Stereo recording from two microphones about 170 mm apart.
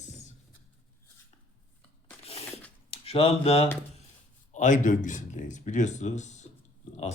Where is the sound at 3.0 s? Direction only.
35° left (ahead or behind).